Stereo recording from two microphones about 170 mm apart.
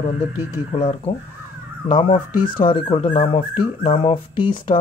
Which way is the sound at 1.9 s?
30° left (ahead or behind).